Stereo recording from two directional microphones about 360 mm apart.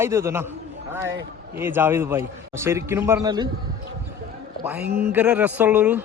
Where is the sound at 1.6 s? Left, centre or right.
Centre.